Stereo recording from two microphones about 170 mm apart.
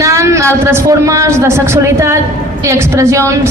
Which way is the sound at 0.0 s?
20° right (ahead or behind).